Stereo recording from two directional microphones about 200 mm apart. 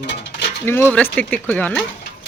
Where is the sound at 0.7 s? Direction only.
10° left (ahead or behind).